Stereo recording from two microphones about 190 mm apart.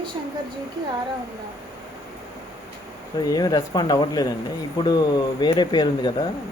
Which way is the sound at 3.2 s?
20° left (ahead or behind).